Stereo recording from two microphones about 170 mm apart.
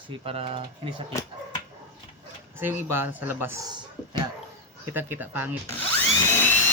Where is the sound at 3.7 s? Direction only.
25° right (ahead or behind).